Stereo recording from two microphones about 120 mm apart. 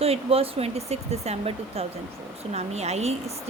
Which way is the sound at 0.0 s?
55° right (ahead or behind).